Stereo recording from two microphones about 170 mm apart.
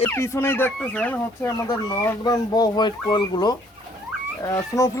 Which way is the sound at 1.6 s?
25° left (ahead or behind).